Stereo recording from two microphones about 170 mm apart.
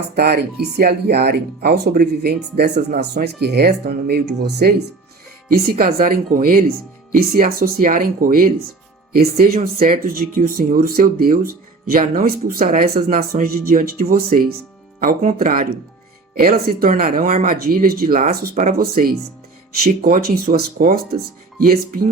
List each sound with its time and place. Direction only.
0.2 s speech: 70° right (ahead or behind)
5.5 s speech: 60° right (ahead or behind)
9.6 s speech: 40° right (ahead or behind)
10.0 s speech: 55° right (ahead or behind)